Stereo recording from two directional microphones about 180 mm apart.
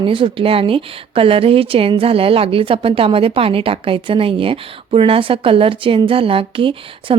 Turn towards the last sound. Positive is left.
turn(degrees=-30)  # may be behind; listen again after turning